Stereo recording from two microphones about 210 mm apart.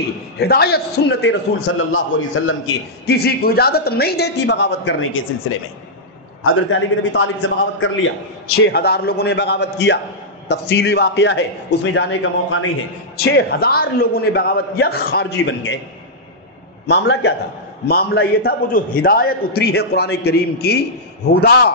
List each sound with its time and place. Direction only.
0.4 s a man's voice: 50° left (ahead or behind); by 2.5 s 75° left (ahead or behind)
3.1 s a man's voice: 50° left (ahead or behind)
6.4 s a man's voice: 70° left (ahead or behind)
8.6 s a man's voice: 50° left (ahead or behind); by 12.6 s 70° left (ahead or behind)
13.3 s a man's voice: 50° left (ahead or behind)
16.8 s a man's voice: 55° left (ahead or behind)